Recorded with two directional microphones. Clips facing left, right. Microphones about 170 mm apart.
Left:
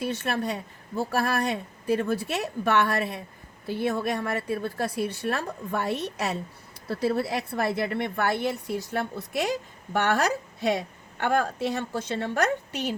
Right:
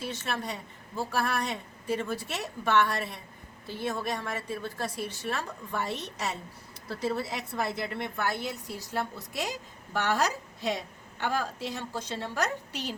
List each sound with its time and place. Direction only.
0.0 s a woman's voice: 60° left (ahead or behind)